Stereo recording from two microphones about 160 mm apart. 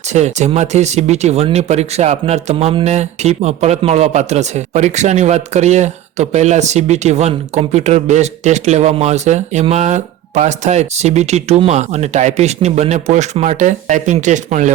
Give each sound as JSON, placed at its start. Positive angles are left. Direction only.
{"t": 0.1, "sound": "speech", "side_deg": -45}